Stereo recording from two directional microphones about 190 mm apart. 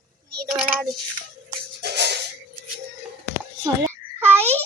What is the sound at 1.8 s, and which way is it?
Music, 60° right (ahead or behind).